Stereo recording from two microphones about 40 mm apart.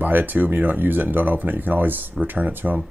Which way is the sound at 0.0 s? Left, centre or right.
Right.